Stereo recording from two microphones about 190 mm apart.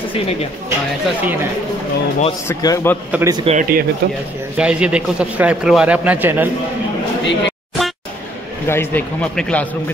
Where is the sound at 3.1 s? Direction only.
10° right (ahead or behind).